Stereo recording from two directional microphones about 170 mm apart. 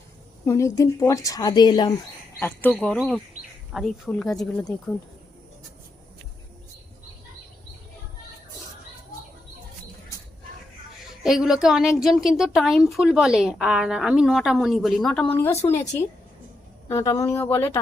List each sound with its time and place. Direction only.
0.4 s a woman's voice: 20° left (ahead or behind)
2.4 s speech: 10° left (ahead or behind)
11.2 s speech: 5° right (ahead or behind)
15.6 s a woman's voice: 20° left (ahead or behind)
16.9 s speech: 20° left (ahead or behind)